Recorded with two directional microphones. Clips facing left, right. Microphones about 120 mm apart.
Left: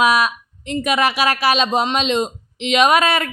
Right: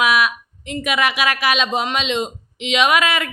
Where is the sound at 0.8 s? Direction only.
35° left (ahead or behind).